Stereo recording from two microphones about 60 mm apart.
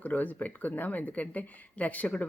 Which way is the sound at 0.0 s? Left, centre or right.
Left.